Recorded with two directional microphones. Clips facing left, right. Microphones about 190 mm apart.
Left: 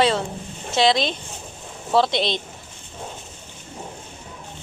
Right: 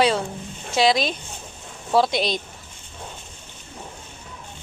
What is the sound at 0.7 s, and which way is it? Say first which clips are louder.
Speech: even; 25° left (ahead or behind).